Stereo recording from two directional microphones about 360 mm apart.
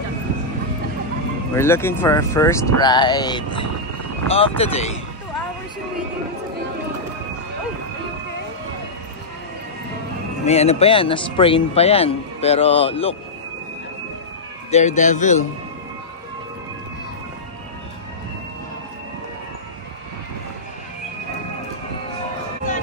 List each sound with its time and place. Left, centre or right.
1.5 s a man's voice: centre
10.4 s a man's voice: centre
14.7 s a man's voice: centre